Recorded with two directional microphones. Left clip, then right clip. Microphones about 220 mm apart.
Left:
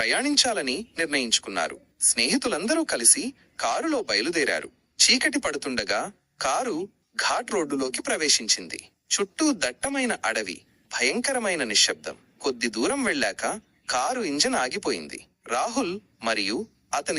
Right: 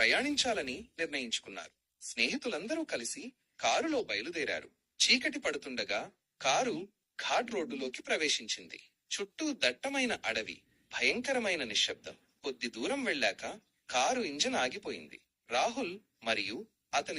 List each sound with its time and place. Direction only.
0.0 s speech: 45° left (ahead or behind)